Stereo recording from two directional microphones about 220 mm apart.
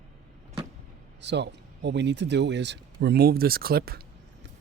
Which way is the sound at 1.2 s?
50° right (ahead or behind).